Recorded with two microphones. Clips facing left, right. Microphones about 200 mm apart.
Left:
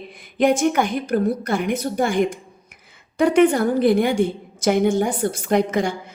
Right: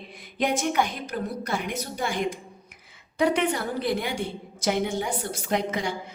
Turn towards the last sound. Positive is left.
turn(degrees=50)  # may be behind; listen again after turning